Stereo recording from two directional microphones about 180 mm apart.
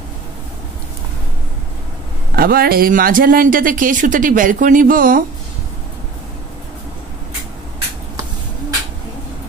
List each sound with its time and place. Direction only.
2.3 s speech: 55° right (ahead or behind)